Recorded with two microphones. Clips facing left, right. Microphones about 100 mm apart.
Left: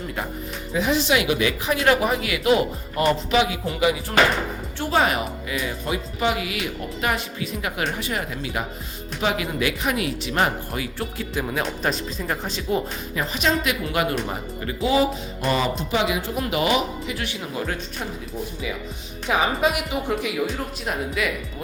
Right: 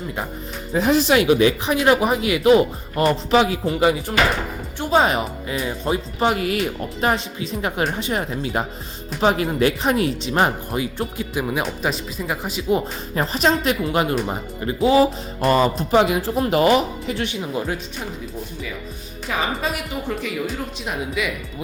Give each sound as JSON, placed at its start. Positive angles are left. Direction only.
{"t": 0.7, "sound": "speech", "side_deg": -40}
{"t": 4.8, "sound": "speech", "side_deg": -20}
{"t": 7.0, "sound": "speech", "side_deg": -30}
{"t": 11.6, "sound": "speech", "side_deg": -5}
{"t": 13.1, "sound": "speech", "side_deg": -40}
{"t": 15.4, "sound": "speech", "side_deg": -45}
{"t": 19.3, "sound": "a woman's voice", "side_deg": 15}
{"t": 20.5, "sound": "speech", "side_deg": 0}